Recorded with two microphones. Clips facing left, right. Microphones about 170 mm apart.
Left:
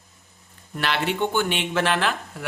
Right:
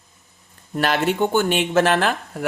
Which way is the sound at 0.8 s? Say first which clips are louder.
Right 5 dB; 45° right (ahead or behind).